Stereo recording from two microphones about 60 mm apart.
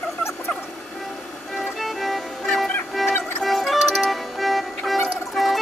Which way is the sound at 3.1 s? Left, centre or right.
Left.